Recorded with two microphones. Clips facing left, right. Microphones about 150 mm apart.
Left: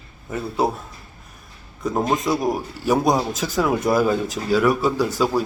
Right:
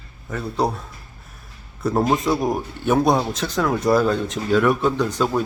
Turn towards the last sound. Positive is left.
turn(degrees=5)  # may be behind; listen again after turning